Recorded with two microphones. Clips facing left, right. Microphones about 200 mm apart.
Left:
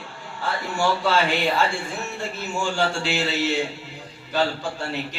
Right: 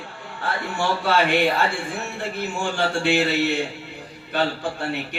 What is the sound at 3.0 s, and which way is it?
Speech, 55° right (ahead or behind).